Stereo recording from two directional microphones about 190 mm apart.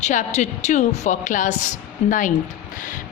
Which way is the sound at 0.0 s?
40° left (ahead or behind).